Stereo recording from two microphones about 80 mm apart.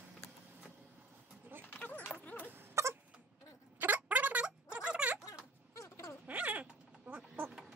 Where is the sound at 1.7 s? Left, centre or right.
Left.